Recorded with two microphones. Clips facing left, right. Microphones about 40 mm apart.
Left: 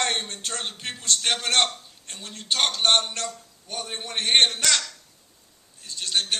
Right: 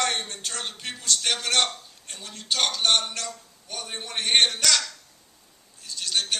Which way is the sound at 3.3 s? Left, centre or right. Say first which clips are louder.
Left 2 dB; centre.